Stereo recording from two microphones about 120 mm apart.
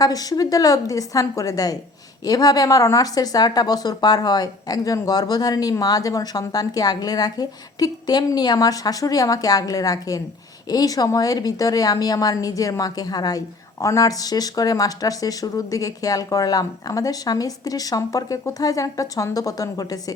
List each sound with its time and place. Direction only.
0.0 s speech: 30° left (ahead or behind)